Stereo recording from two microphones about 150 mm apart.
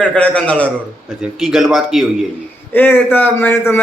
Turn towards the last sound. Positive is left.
turn(degrees=15)  # may be behind; listen again after turning